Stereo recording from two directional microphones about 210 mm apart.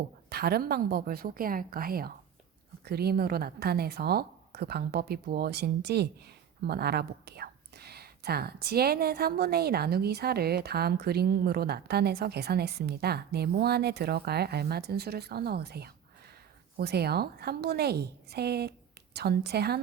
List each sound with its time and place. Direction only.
0.3 s a woman's voice: 50° right (ahead or behind)